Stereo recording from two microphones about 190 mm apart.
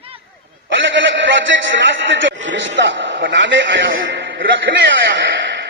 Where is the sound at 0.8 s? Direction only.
75° right (ahead or behind).